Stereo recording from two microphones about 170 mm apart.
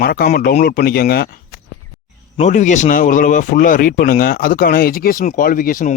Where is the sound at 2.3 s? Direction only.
45° left (ahead or behind).